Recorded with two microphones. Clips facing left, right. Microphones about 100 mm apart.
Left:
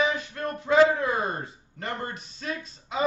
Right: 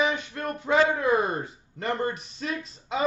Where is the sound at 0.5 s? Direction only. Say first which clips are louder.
Left 3 dB; 25° right (ahead or behind).